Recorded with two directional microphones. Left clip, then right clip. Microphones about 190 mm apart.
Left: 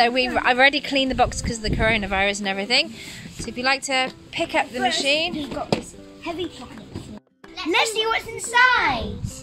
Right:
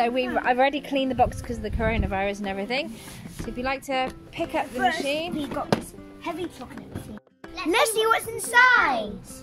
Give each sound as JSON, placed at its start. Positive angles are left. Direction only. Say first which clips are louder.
{"t": 0.0, "sound": "speech", "louder": "left 5 dB", "side_deg": -5}
{"t": 7.7, "sound": "a child's voice", "louder": "even", "side_deg": -20}